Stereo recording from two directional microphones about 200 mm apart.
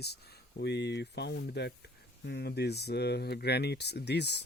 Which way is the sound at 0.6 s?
60° left (ahead or behind).